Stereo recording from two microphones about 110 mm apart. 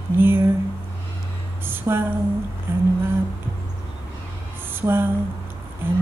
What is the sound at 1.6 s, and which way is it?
Speech, 20° right (ahead or behind).